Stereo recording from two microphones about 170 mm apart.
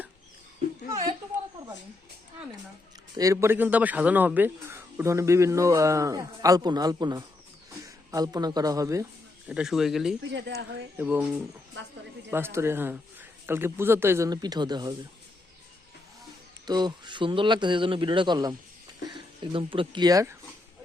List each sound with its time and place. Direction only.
3.2 s a man's voice: 15° right (ahead or behind)
9.5 s speech: 5° right (ahead or behind)
10.2 s speech: 90° right
10.9 s a man's voice: 10° right (ahead or behind)
16.6 s a man's voice: 25° right (ahead or behind)